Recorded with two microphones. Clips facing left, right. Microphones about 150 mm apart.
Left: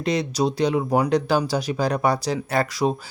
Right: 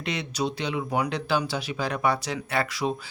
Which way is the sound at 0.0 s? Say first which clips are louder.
Left 7 dB; 35° left (ahead or behind).